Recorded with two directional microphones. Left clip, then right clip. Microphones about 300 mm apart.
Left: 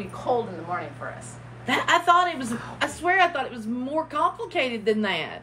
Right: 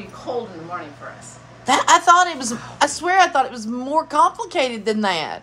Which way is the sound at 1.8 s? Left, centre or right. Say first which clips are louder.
Right 6 dB; right.